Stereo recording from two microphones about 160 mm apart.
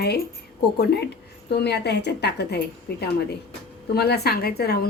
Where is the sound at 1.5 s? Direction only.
90° left.